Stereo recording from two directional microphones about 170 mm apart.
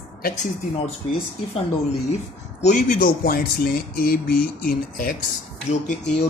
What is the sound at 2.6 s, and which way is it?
Speech, 50° left (ahead or behind).